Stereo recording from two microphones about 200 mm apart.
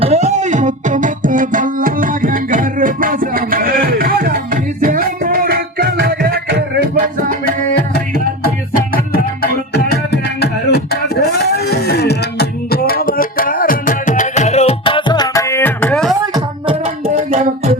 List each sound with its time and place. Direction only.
0.0 s music: 35° right (ahead or behind); by 6.8 s 50° right (ahead or behind)
9.1 s music: 50° left (ahead or behind); by 16.1 s 5° left (ahead or behind)
16.3 s singing: 30° right (ahead or behind)